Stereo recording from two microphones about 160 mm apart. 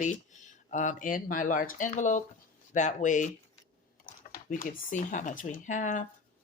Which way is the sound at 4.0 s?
65° left (ahead or behind).